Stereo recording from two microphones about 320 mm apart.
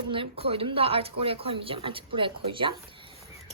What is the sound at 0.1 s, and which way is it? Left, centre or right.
A woman's voice, centre.